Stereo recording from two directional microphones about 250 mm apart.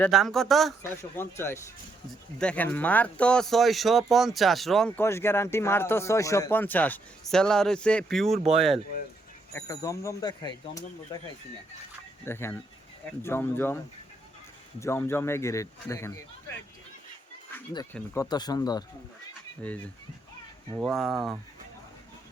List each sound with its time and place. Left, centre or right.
0.0 s speech: centre
9.5 s speech: centre
12.2 s speech: centre
17.5 s speech: centre